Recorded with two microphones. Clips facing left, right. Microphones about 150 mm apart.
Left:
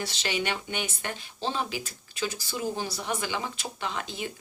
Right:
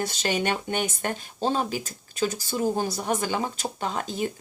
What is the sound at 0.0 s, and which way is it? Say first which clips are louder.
Speech: right 5 dB; 45° right (ahead or behind).